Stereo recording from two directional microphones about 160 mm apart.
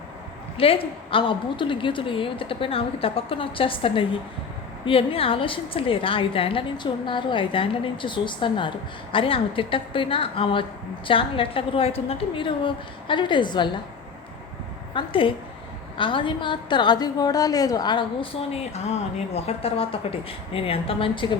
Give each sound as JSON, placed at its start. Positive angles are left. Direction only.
{"t": 0.5, "sound": "a woman's voice", "side_deg": 35}
{"t": 14.9, "sound": "a woman's voice", "side_deg": 35}